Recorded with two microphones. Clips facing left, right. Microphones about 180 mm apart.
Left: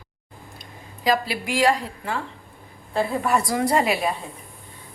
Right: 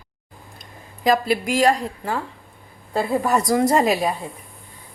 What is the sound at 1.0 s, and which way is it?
A woman's voice, 45° right (ahead or behind).